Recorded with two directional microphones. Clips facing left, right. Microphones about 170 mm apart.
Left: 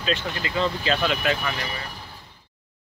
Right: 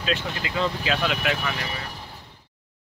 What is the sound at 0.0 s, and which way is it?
Speech, 5° right (ahead or behind).